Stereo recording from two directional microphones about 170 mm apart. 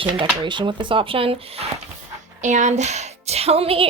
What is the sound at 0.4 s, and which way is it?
Speech, 30° right (ahead or behind).